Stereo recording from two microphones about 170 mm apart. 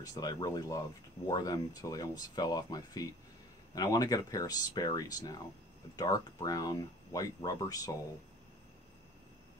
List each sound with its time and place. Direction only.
0.0 s speech: 20° left (ahead or behind)